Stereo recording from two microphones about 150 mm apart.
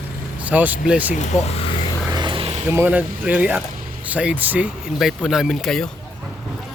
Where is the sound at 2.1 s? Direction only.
30° right (ahead or behind).